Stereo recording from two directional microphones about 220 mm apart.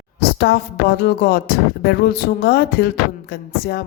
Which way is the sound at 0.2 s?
45° left (ahead or behind).